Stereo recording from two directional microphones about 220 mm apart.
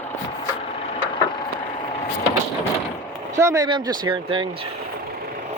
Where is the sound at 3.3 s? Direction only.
15° right (ahead or behind).